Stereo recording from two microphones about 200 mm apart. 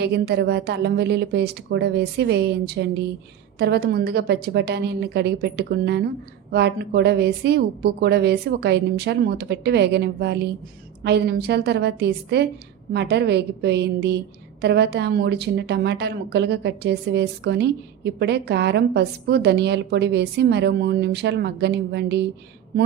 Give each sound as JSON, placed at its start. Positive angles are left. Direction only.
{"t": 0.0, "sound": "a woman's voice", "side_deg": -55}